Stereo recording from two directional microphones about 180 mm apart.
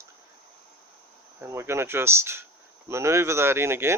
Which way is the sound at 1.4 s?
15° right (ahead or behind).